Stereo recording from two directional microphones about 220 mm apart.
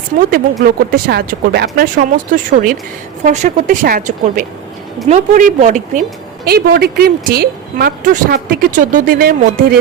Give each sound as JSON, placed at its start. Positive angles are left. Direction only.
{"t": 0.2, "sound": "a woman's voice", "side_deg": -40}